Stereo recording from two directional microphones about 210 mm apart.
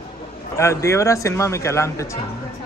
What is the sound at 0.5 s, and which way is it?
A man's voice, 15° left (ahead or behind).